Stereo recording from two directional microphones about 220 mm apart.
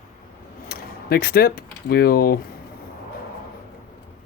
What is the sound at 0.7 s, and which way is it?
Speech, 45° left (ahead or behind).